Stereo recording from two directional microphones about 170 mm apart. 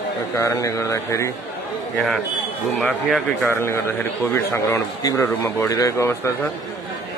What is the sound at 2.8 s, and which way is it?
Speech, centre (ahead or behind).